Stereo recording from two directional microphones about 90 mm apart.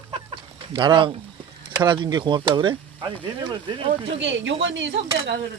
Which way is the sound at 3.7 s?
80° right.